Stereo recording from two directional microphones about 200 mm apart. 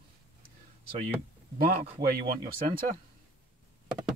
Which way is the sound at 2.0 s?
45° right (ahead or behind).